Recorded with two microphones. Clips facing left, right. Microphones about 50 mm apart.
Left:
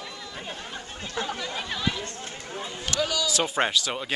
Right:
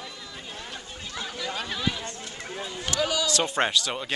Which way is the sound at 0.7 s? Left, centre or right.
Left.